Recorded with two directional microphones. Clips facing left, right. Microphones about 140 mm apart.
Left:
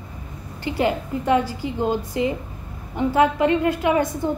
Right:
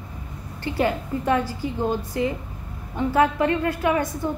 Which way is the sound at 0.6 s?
20° left (ahead or behind).